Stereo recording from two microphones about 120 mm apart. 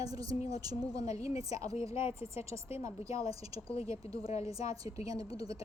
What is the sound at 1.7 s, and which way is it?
Speech, 55° left (ahead or behind).